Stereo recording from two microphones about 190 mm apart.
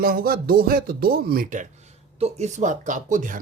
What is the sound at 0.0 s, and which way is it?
Speech, 50° right (ahead or behind).